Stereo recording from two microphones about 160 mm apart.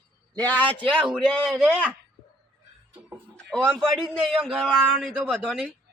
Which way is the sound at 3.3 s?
5° left (ahead or behind).